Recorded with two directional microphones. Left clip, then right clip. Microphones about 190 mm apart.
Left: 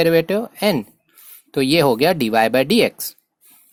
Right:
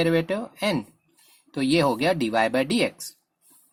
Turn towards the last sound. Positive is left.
turn(degrees=45)  # may be behind; listen again after turning